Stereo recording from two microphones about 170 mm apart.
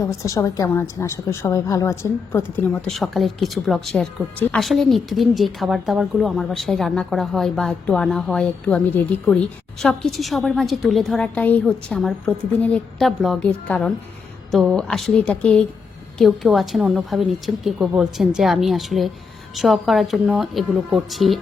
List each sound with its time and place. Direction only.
0.2 s a woman's voice: 20° left (ahead or behind); by 21.3 s centre (ahead or behind)